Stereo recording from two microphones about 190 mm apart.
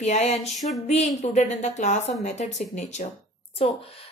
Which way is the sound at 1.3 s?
35° left (ahead or behind).